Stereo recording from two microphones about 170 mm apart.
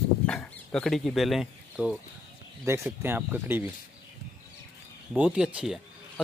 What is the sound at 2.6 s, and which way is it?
Speech, 15° right (ahead or behind).